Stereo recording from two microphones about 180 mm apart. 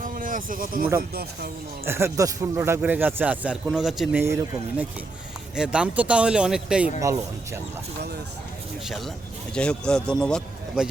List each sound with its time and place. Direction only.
0.0 s a sound: 50° right (ahead or behind)
1.1 s speech: 60° right (ahead or behind)
1.8 s speech: 15° right (ahead or behind)
4.2 s speech: 15° right (ahead or behind)
7.0 s speech: 15° right (ahead or behind)
9.6 s speech: 5° left (ahead or behind)